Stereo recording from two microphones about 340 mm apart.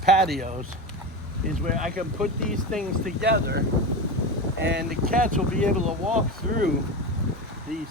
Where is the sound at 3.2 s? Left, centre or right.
Right.